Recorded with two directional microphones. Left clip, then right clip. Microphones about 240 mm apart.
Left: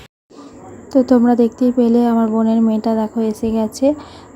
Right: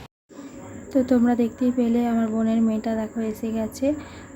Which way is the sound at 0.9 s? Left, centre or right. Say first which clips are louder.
Left 8 dB; centre.